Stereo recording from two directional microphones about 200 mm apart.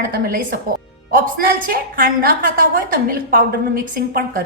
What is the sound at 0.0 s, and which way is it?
A woman's voice, 50° right (ahead or behind).